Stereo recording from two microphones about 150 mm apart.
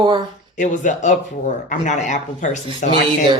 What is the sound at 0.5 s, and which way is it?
Speech, 60° left (ahead or behind).